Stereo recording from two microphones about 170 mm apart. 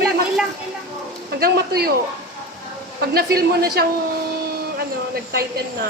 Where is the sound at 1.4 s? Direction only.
65° right (ahead or behind).